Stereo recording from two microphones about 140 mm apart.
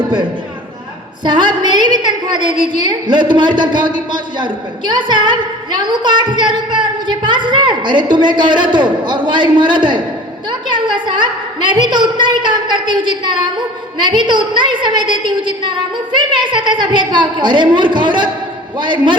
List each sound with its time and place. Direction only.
1.2 s a woman's voice: 35° right (ahead or behind)